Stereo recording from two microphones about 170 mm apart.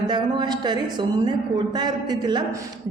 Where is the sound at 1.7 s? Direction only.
25° right (ahead or behind).